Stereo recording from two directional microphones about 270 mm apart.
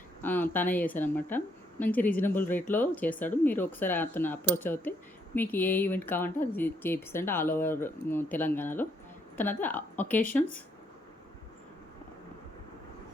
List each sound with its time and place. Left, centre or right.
0.2 s speech: centre